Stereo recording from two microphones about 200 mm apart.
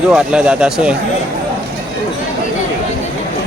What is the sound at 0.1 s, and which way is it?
Speech, 5° right (ahead or behind).